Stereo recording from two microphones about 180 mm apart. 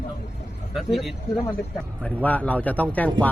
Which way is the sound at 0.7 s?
Centre (ahead or behind).